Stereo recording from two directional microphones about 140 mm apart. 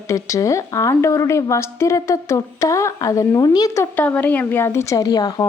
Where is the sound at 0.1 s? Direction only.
20° left (ahead or behind).